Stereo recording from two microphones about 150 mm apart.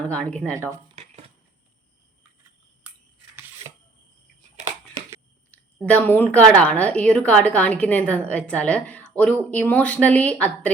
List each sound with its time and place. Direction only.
0.0 s a woman's voice: 10° left (ahead or behind)
0.5 s speech: 20° right (ahead or behind)
5.5 s a woman's voice: 10° left (ahead or behind)